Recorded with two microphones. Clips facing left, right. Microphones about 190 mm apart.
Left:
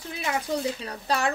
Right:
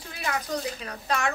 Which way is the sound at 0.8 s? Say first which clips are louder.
Left 2 dB; 35° left (ahead or behind).